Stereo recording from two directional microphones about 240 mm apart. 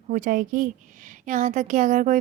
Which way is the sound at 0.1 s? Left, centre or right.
Right.